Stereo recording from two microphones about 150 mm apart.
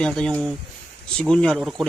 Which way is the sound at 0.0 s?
5° left (ahead or behind).